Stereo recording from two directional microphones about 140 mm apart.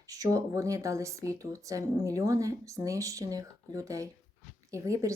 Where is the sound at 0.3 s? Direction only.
25° right (ahead or behind).